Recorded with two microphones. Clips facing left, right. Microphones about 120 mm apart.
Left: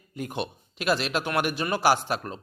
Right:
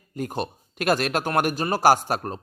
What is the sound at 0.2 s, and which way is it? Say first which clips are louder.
A man's voice: right 3 dB; 40° right (ahead or behind).